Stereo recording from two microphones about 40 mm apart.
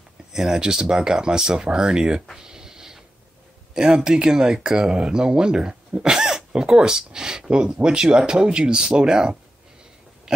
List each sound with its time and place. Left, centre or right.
0.3 s speech: centre
2.3 s a sound: centre
3.7 s speech: centre